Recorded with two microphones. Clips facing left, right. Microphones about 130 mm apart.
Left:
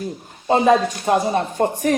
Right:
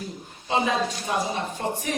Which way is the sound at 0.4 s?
50° left (ahead or behind).